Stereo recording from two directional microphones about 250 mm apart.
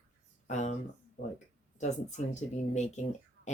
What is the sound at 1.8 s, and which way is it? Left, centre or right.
Speech, left.